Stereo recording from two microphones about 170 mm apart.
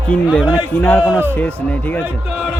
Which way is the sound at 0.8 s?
10° left (ahead or behind).